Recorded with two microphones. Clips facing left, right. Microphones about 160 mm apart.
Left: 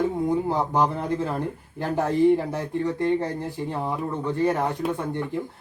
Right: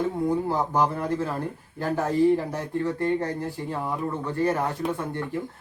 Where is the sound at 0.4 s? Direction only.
20° left (ahead or behind).